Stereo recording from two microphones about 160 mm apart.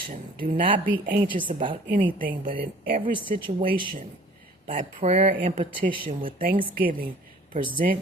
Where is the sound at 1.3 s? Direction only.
30° right (ahead or behind).